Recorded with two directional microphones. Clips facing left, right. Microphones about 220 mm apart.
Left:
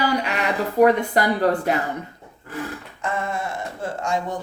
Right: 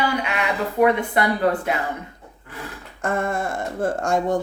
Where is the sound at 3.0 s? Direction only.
50° right (ahead or behind).